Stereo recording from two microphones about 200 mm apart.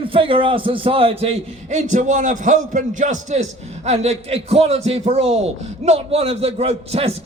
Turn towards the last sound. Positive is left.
turn(degrees=-30)  # may be behind; listen again after turning